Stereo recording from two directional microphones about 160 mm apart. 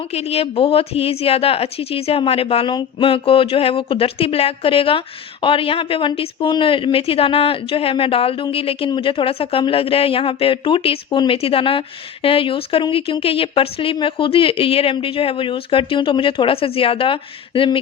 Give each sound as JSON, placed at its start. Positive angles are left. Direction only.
{"t": 0.1, "sound": "a woman's voice", "side_deg": 40}